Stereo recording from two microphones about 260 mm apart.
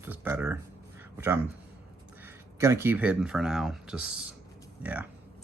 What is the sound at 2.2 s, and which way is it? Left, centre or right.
Speech, centre.